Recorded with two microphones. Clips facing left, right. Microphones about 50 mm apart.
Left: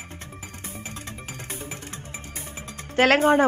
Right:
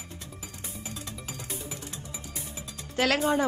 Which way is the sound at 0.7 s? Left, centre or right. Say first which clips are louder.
Left 2 dB; left.